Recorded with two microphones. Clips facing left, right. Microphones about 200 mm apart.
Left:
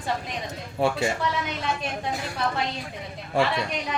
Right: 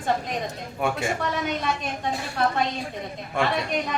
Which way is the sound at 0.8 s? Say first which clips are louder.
Left 2 dB; 30° left (ahead or behind).